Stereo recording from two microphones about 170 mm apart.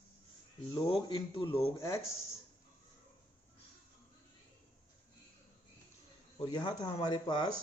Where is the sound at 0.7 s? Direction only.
30° left (ahead or behind).